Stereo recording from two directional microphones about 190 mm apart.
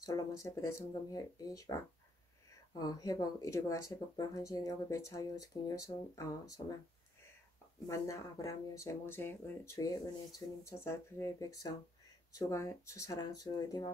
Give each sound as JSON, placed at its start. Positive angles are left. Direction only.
{"t": 0.0, "sound": "speech", "side_deg": 15}
{"t": 7.9, "sound": "speech", "side_deg": 15}